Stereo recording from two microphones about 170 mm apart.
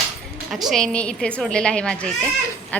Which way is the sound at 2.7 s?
10° left (ahead or behind).